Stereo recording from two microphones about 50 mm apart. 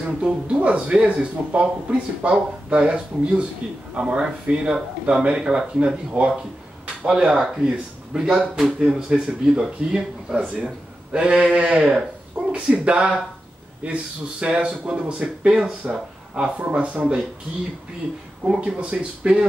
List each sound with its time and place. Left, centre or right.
0.2 s speech: right
10.4 s speech: right
18.6 s speech: right